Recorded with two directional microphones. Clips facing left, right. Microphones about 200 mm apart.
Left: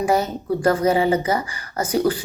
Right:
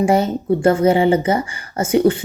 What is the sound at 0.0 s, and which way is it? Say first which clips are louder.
Speech: right 4 dB; 30° right (ahead or behind).